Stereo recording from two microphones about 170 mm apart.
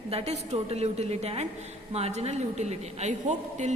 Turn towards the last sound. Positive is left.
turn(degrees=-45)  # may be behind; listen again after turning